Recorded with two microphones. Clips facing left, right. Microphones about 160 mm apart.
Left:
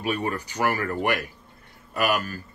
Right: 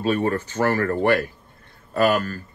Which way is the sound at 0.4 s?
15° left (ahead or behind).